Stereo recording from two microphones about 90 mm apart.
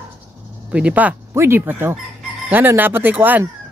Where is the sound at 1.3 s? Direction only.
30° right (ahead or behind).